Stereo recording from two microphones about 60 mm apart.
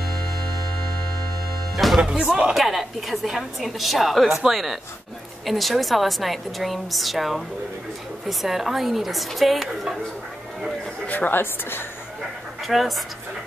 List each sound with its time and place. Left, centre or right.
2.0 s speech: centre
2.5 s a woman's voice: centre
11.1 s speech: left
12.6 s a woman's voice: centre